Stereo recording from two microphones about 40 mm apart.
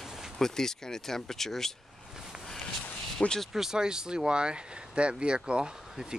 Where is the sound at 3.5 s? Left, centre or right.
Centre.